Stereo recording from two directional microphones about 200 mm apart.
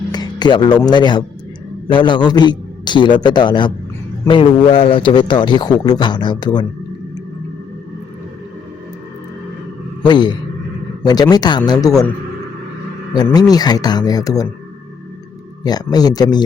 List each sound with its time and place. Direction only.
0.1 s music: 20° left (ahead or behind)
0.8 s a man's voice: 20° left (ahead or behind)
10.0 s a man's voice: 20° left (ahead or behind)
13.2 s a man's voice: 20° left (ahead or behind)
15.6 s a man's voice: 20° left (ahead or behind)